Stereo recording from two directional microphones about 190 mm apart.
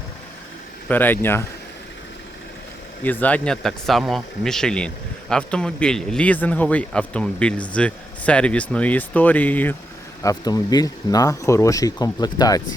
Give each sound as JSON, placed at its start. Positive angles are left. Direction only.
{"t": 0.9, "sound": "a man's voice", "side_deg": 10}
{"t": 3.0, "sound": "a man's voice", "side_deg": 10}
{"t": 10.2, "sound": "speech", "side_deg": 20}